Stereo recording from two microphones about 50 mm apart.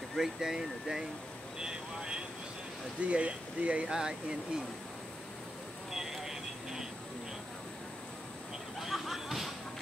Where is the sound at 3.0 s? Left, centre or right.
Right.